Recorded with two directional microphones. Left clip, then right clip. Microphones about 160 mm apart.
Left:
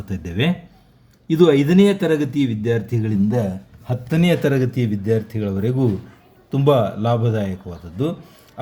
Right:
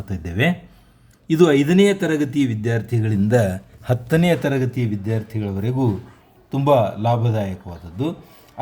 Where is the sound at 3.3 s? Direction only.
45° right (ahead or behind).